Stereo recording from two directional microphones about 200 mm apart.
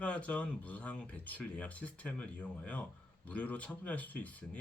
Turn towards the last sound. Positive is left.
turn(degrees=5)  # may be behind; listen again after turning